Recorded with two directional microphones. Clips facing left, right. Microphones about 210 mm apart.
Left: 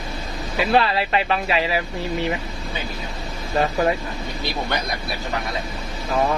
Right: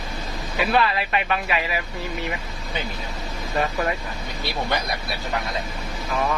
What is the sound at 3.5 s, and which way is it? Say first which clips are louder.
Speech: left 4 dB; 25° left (ahead or behind).